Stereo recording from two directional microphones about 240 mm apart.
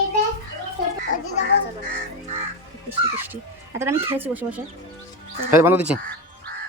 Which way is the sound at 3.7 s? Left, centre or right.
Centre.